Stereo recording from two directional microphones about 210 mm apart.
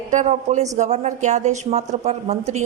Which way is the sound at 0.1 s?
35° right (ahead or behind).